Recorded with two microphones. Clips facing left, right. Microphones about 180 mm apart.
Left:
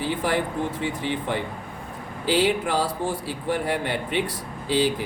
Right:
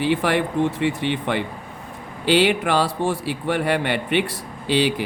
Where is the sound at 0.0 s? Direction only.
75° right (ahead or behind).